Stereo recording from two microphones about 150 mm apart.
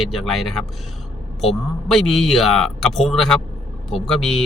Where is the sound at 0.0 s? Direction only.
Centre (ahead or behind).